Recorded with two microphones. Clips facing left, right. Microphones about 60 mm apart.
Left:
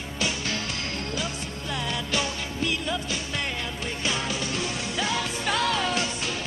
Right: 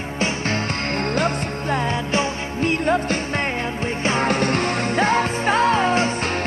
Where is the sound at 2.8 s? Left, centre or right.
Right.